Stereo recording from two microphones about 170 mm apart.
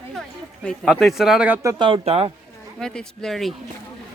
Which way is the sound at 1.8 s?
35° right (ahead or behind).